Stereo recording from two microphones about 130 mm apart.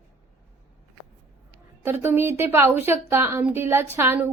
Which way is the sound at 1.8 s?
20° right (ahead or behind).